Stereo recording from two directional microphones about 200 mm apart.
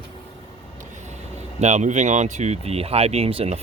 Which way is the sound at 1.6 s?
35° right (ahead or behind).